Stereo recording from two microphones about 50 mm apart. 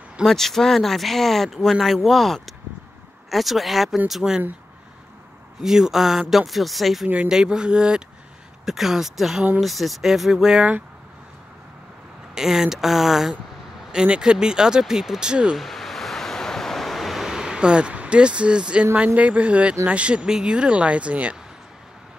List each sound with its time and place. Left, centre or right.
0.2 s speech: centre
5.6 s speech: centre
7.2 s speech: centre
8.6 s speech: centre
12.4 s speech: centre
13.9 s speech: centre
15.5 s waves: centre
19.1 s speech: right